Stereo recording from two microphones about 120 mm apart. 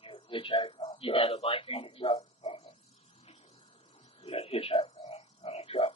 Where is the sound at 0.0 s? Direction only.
45° left (ahead or behind).